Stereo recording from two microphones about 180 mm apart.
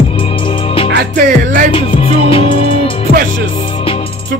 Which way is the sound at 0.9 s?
65° right (ahead or behind).